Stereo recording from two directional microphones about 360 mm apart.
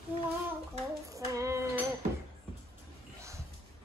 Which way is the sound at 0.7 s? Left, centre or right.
Centre.